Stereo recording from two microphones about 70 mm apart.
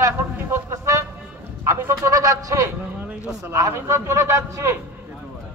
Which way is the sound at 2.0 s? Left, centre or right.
Right.